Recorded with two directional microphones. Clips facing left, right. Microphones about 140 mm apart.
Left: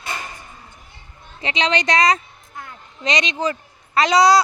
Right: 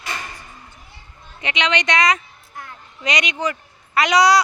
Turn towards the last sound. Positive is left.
turn(degrees=30)  # may be behind; listen again after turning